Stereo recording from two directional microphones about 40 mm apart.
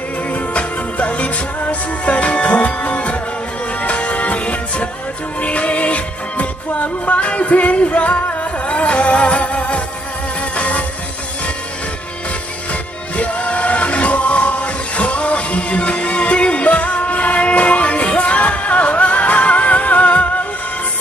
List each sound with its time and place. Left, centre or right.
0.3 s music: left
13.1 s music: left